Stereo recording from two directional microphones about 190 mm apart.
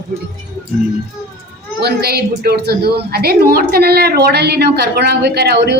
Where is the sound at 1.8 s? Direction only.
55° right (ahead or behind).